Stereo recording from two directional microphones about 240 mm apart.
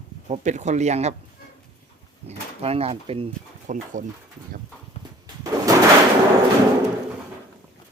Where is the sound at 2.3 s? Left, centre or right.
Right.